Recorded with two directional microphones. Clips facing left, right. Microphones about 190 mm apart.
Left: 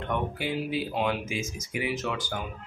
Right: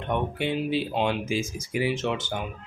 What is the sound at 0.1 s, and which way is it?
Speech, 25° right (ahead or behind).